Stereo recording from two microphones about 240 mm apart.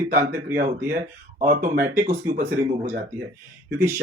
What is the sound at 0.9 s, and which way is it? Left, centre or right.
Speech, right.